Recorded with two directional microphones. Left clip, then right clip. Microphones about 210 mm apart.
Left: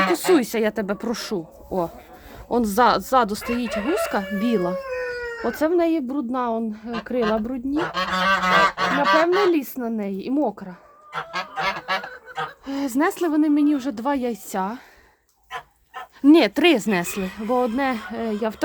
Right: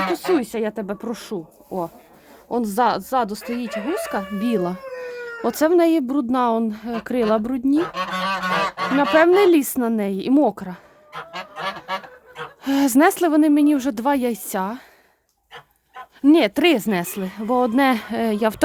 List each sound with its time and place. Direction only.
0.1 s speech: centre (ahead or behind); by 4.8 s 20° right (ahead or behind)
5.2 s speech: 30° right (ahead or behind)
7.9 s a sound: 15° right (ahead or behind)
9.5 s speech: 35° right (ahead or behind)
11.1 s goose: 10° right (ahead or behind)
12.6 s speech: 40° right (ahead or behind); by 14.8 s 25° right (ahead or behind)
16.2 s a woman's voice: 10° right (ahead or behind); by 18.6 s 30° right (ahead or behind)